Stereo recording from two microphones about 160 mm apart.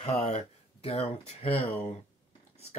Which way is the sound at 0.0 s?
35° left (ahead or behind).